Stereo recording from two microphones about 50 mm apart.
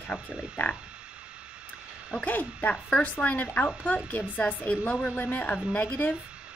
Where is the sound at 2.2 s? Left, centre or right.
Left.